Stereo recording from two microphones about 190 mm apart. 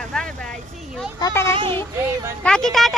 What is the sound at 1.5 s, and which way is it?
Speech, 25° right (ahead or behind).